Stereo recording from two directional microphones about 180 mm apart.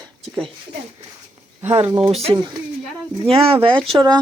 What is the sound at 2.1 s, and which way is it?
Speech, 35° right (ahead or behind).